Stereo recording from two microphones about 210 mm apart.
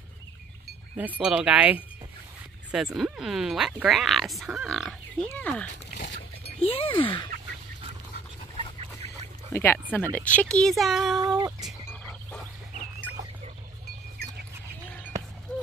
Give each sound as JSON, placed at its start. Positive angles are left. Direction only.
{"t": 0.9, "sound": "speech", "side_deg": -10}
{"t": 6.6, "sound": "speech", "side_deg": 25}
{"t": 9.5, "sound": "speech", "side_deg": 10}
{"t": 11.1, "sound": "speech", "side_deg": -20}
{"t": 11.6, "sound": "frog", "side_deg": 5}
{"t": 15.5, "sound": "a sound", "side_deg": 0}